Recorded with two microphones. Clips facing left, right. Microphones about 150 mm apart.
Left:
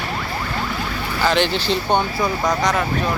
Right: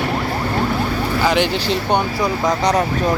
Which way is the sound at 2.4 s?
25° right (ahead or behind).